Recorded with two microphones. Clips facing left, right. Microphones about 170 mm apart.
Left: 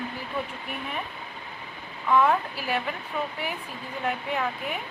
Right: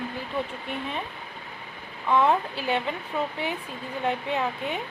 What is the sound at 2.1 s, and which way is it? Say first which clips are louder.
Speech: even; 20° right (ahead or behind).